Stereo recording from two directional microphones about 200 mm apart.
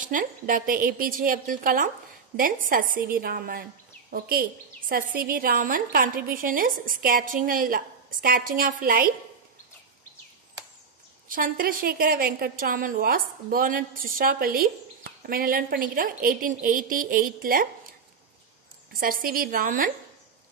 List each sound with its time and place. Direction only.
0.0 s a woman's voice: 40° right (ahead or behind)
11.2 s a woman's voice: 45° right (ahead or behind)
18.9 s a woman's voice: 45° right (ahead or behind)